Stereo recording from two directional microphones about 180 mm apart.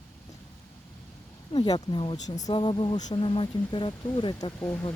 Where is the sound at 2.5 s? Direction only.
25° left (ahead or behind).